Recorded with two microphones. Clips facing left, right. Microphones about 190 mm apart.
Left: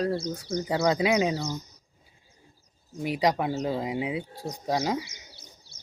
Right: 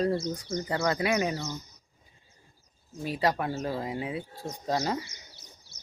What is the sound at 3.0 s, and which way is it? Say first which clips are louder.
Speech: left 3 dB; 15° left (ahead or behind).